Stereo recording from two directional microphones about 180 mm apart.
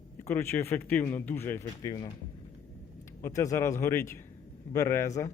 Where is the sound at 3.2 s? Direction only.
20° left (ahead or behind).